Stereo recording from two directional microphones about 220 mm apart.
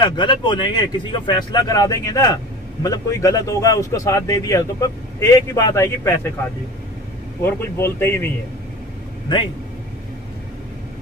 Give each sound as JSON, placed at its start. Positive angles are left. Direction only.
{"t": 0.0, "sound": "speech", "side_deg": 20}
{"t": 7.4, "sound": "speech", "side_deg": 10}